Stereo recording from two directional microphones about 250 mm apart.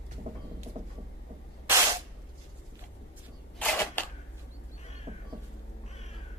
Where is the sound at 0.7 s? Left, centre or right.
Right.